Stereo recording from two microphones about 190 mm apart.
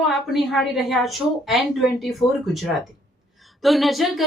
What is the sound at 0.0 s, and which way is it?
A woman's voice, centre (ahead or behind).